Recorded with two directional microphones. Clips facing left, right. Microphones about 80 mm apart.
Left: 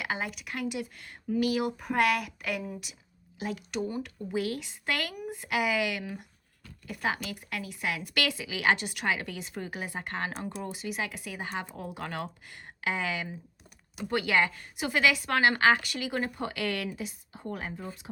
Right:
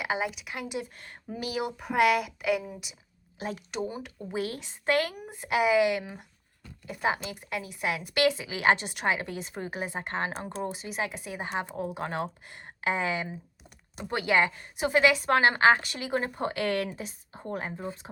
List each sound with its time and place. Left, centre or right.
0.0 s a woman's voice: centre
0.6 s speech: right
0.9 s speech: right
1.4 s speech: centre
1.7 s a woman's voice: centre
3.3 s speech: right